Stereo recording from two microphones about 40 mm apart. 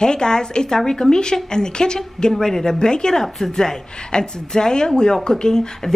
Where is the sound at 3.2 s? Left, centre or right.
Centre.